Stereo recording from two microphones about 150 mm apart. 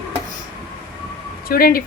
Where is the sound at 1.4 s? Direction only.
80° left.